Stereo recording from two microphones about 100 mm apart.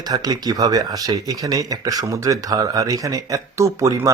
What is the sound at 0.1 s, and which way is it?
Speech, 40° right (ahead or behind).